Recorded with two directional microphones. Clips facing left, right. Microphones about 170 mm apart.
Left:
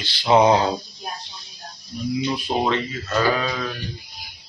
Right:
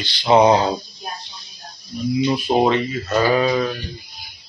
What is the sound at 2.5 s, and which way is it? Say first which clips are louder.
Speech: right 5 dB; 20° right (ahead or behind).